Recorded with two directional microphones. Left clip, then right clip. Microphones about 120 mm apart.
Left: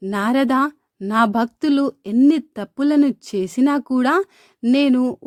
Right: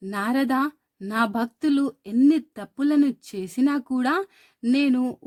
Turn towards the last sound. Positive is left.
turn(degrees=35)  # may be behind; listen again after turning